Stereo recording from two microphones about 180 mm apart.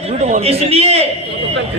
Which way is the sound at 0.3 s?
40° right (ahead or behind).